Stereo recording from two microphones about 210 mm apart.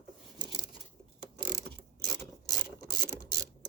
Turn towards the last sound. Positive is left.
turn(degrees=20)  # may be behind; listen again after turning